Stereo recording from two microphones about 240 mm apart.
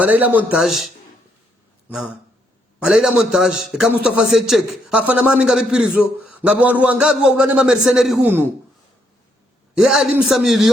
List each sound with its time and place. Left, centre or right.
0.0 s speech: centre
2.8 s speech: centre
9.7 s speech: centre